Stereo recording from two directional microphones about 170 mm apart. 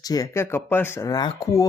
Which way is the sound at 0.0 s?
20° left (ahead or behind).